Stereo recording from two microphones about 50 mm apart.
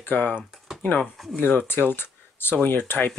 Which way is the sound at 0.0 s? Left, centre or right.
Left.